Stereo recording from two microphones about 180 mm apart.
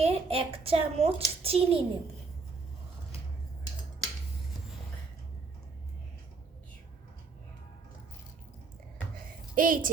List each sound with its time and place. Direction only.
0.0 s a child's voice: 35° right (ahead or behind)
9.6 s a child's voice: 50° right (ahead or behind)